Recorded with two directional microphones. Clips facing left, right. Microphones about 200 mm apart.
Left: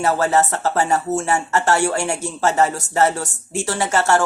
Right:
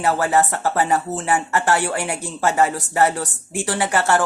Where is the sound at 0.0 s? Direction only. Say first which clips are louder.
Left 1 dB; 15° right (ahead or behind).